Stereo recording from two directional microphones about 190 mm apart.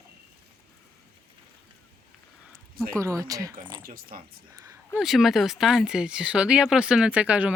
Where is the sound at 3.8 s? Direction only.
50° right (ahead or behind).